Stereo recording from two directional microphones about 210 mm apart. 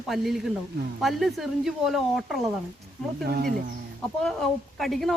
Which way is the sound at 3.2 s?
45° right (ahead or behind).